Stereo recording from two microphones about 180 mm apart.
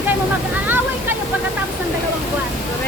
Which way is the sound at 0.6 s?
10° right (ahead or behind).